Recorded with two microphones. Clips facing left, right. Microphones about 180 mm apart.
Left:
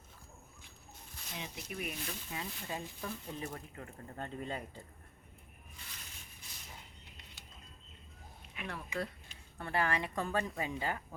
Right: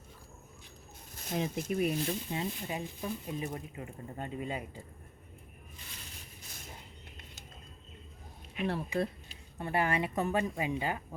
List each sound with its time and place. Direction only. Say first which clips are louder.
1.1 s speech: right 12 dB; 45° right (ahead or behind)
1.8 s speech: right 10 dB; 35° right (ahead or behind); by 4.8 s 10° right (ahead or behind)
8.5 s speech: right 8 dB; 30° right (ahead or behind)
9.6 s speech: right 3 dB; 20° right (ahead or behind)